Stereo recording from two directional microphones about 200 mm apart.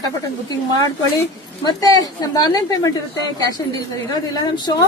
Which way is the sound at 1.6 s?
20° left (ahead or behind).